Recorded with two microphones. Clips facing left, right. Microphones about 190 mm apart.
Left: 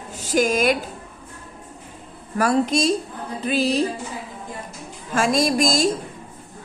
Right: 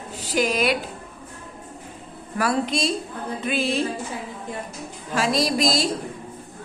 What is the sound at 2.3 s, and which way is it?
A woman's voice, 45° left (ahead or behind).